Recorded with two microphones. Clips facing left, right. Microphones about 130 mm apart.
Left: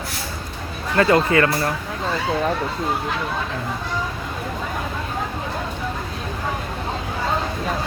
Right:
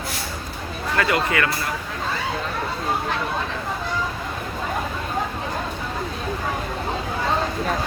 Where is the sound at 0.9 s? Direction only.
30° left (ahead or behind).